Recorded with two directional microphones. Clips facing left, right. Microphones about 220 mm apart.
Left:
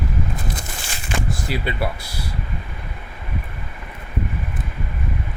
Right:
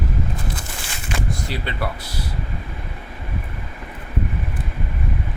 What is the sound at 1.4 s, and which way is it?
Speech, 10° left (ahead or behind).